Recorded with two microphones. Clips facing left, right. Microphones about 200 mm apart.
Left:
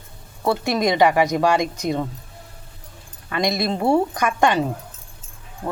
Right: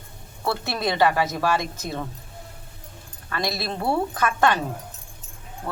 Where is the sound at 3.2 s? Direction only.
15° left (ahead or behind).